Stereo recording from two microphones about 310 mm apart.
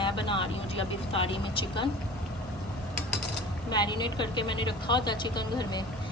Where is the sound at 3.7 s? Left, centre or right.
Centre.